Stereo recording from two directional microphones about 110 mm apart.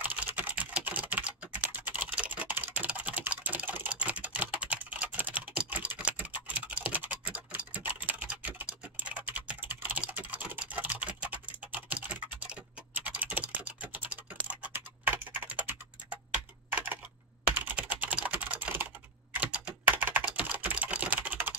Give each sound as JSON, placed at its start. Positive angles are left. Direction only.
{"t": 0.0, "sound": "typing", "side_deg": -15}
{"t": 17.7, "sound": "typing", "side_deg": -15}